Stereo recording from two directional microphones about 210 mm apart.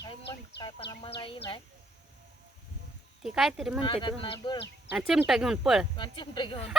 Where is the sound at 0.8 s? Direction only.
55° left (ahead or behind).